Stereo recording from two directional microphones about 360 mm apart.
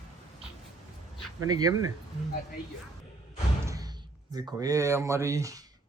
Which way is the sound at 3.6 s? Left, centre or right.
Centre.